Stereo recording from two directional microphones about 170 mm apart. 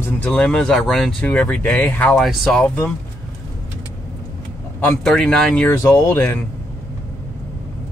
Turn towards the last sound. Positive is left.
turn(degrees=15)  # may be behind; listen again after turning